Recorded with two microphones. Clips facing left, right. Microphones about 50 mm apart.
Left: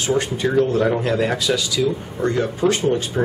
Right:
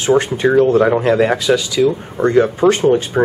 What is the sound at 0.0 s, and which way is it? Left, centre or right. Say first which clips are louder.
Speech: right 7 dB; right.